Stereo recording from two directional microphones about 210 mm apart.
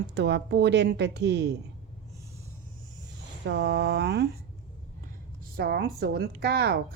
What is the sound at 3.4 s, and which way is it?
Speech, 55° right (ahead or behind).